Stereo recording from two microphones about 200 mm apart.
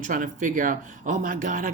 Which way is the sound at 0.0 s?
40° right (ahead or behind).